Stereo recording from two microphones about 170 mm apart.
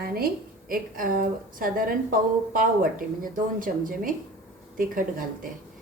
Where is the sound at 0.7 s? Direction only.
55° right (ahead or behind).